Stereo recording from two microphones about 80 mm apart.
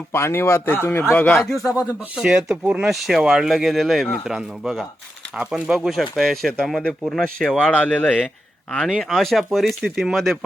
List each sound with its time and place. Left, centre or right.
0.1 s speech: left
1.4 s speech: centre
1.6 s speech: left
2.1 s speech: centre